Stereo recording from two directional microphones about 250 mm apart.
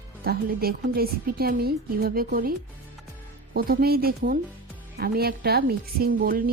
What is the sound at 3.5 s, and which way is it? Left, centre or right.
Speech, right.